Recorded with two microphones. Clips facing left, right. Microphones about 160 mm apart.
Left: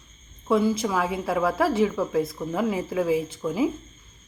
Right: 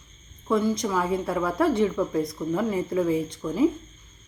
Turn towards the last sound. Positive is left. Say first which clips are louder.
# right 2 dB
turn(degrees=5)  # may be behind; listen again after turning